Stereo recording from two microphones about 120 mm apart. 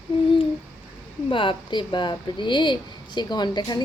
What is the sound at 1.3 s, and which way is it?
Speech, 45° left (ahead or behind).